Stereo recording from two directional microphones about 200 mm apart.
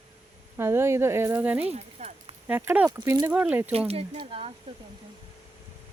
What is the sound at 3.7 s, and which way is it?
Speech, 30° right (ahead or behind).